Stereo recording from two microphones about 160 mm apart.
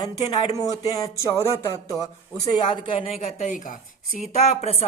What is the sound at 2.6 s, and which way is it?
A woman's voice, 30° left (ahead or behind).